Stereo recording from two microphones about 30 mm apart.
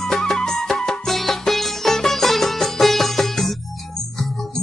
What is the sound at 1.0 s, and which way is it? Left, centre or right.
Music, centre.